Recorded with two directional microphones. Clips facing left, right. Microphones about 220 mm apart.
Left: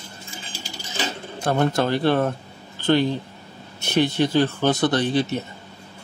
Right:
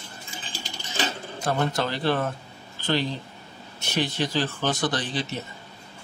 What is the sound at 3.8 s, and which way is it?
Speech, 55° left (ahead or behind).